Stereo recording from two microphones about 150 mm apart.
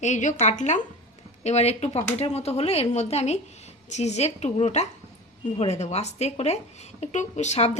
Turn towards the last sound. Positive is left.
turn(degrees=50)  # may be behind; listen again after turning